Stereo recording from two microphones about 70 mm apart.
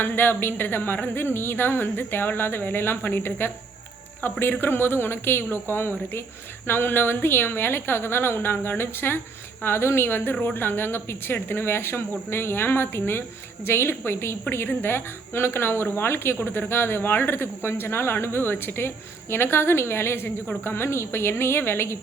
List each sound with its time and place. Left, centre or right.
0.0 s speech: left